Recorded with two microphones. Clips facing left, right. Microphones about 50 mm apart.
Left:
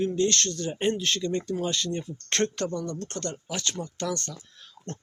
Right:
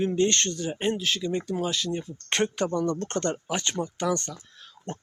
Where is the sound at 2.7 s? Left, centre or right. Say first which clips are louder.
Right 6 dB; right.